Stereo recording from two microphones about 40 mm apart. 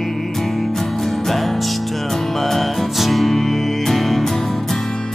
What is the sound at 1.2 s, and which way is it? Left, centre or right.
Music, centre.